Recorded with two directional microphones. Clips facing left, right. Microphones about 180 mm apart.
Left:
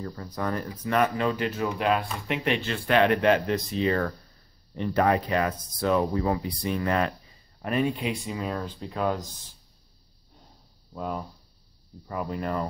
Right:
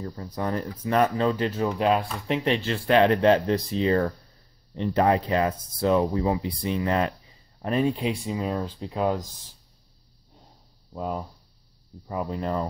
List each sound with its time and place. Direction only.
0.0 s speech: 25° right (ahead or behind)
7.6 s speech: 35° right (ahead or behind)
8.8 s speech: 15° right (ahead or behind)
10.9 s speech: 20° right (ahead or behind)